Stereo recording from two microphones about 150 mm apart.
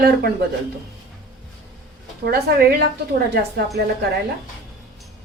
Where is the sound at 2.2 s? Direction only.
90° right.